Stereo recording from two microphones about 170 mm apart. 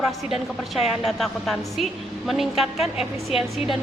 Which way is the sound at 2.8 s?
35° left (ahead or behind).